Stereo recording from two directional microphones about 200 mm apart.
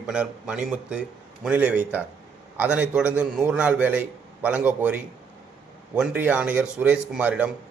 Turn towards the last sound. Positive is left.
turn(degrees=-5)  # may be behind; listen again after turning